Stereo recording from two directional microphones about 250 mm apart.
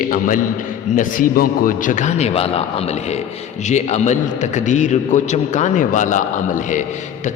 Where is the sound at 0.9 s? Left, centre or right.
Left.